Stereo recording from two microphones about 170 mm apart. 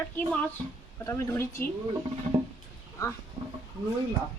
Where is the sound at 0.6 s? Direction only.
5° left (ahead or behind).